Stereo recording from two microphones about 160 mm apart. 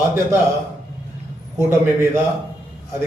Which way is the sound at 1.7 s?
15° right (ahead or behind).